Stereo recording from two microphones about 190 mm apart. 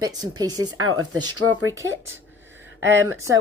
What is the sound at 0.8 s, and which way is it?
Speech, 90° right.